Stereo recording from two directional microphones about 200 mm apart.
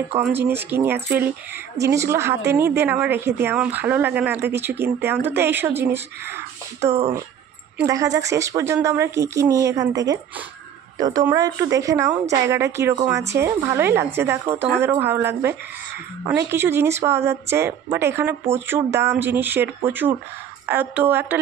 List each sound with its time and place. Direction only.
0.4 s speech: 10° right (ahead or behind)
7.8 s speech: 15° right (ahead or behind)